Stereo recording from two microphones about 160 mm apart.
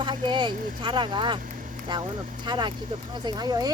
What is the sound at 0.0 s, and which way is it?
Vehicle, 30° right (ahead or behind).